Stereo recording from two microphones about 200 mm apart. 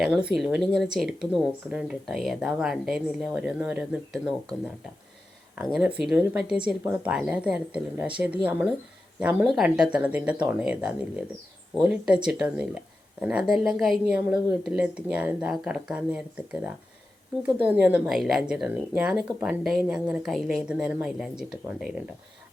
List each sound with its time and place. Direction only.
0.0 s speech: 5° right (ahead or behind)
5.5 s speech: 5° right (ahead or behind)